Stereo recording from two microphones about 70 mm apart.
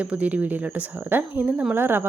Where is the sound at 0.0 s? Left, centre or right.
Centre.